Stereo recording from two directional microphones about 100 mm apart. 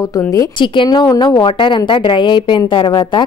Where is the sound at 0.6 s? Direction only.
50° left (ahead or behind).